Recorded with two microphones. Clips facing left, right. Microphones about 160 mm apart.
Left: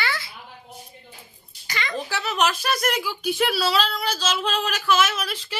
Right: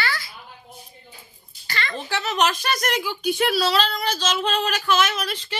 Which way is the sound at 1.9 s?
5° left (ahead or behind).